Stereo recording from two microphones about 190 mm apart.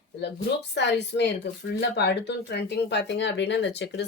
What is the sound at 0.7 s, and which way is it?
Speech, 65° left (ahead or behind).